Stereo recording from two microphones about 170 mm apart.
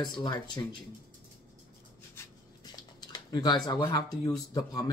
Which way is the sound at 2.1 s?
25° left (ahead or behind).